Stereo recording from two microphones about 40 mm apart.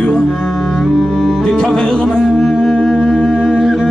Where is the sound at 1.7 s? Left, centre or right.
Centre.